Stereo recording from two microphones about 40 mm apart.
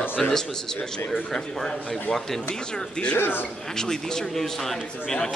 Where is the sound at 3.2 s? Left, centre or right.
Left.